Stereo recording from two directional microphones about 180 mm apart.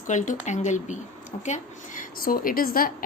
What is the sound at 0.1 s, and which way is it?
A woman's voice, 45° left (ahead or behind).